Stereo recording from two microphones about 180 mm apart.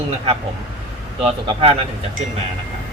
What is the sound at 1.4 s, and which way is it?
Speech, 30° right (ahead or behind).